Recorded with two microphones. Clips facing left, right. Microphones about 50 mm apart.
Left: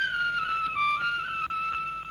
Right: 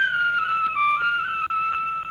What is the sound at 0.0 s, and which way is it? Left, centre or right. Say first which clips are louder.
Music: right 6 dB; right.